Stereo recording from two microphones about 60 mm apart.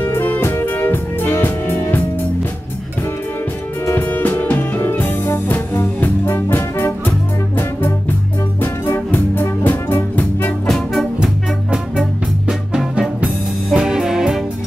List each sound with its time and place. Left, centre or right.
0.2 s music: left
4.0 s music: left
9.1 s music: left
10.7 s music: centre
11.1 s music: centre